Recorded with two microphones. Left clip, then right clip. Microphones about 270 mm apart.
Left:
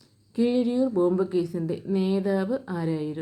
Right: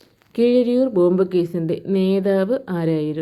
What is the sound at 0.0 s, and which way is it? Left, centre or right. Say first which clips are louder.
A woman's voice: right 8 dB; centre.